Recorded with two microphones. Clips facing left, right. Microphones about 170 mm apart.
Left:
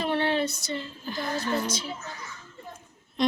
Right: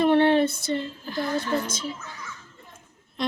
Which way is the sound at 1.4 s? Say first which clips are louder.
Right 1 dB; 50° right (ahead or behind).